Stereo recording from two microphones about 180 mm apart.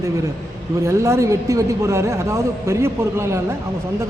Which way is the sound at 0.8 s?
15° right (ahead or behind).